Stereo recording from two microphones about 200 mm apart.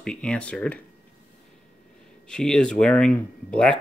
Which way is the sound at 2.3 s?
5° left (ahead or behind).